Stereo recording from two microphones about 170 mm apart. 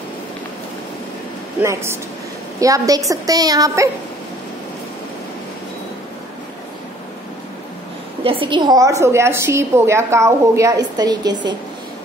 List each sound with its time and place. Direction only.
1.6 s a woman's voice: 15° right (ahead or behind)
8.2 s a woman's voice: 30° right (ahead or behind)